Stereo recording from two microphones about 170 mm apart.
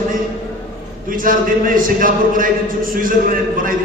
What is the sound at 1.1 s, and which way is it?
A man's voice, 55° right (ahead or behind).